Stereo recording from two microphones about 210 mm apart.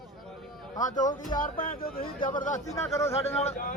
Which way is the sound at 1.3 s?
20° left (ahead or behind).